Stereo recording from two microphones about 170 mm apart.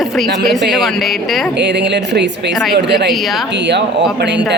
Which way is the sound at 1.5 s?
90° right.